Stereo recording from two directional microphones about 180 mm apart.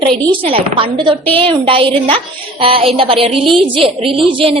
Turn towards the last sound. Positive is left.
turn(degrees=-30)  # may be behind; listen again after turning